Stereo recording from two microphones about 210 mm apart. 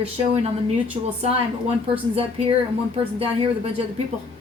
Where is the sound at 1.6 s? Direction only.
25° right (ahead or behind).